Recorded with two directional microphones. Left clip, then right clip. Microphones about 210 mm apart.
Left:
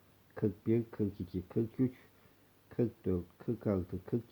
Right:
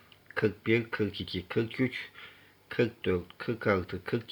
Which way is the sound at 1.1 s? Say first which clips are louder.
Right 7 dB; 5° left (ahead or behind).